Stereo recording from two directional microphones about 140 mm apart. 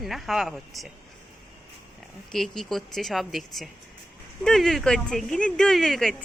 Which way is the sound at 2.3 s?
Centre (ahead or behind).